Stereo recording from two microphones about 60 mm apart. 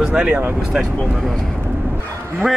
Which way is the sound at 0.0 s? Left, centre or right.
Centre.